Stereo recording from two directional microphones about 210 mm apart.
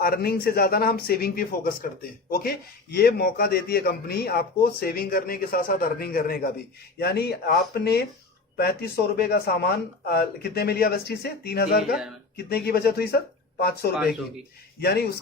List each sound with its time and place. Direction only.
0.0 s a man's voice: 45° left (ahead or behind)
13.9 s speech: centre (ahead or behind)
14.8 s a man's voice: 50° left (ahead or behind)